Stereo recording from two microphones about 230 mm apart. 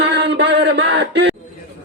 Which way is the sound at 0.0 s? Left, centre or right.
Right.